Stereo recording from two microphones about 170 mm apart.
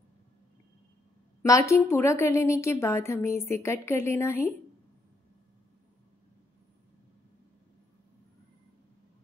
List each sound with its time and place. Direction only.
1.7 s a woman's voice: 15° left (ahead or behind)